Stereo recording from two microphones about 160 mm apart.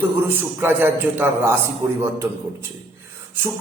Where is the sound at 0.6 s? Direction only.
10° right (ahead or behind).